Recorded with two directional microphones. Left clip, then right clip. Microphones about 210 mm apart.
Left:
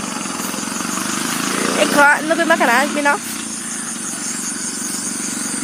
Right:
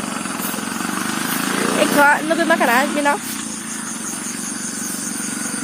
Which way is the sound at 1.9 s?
20° left (ahead or behind).